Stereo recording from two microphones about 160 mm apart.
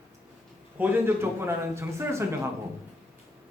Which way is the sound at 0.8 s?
10° right (ahead or behind).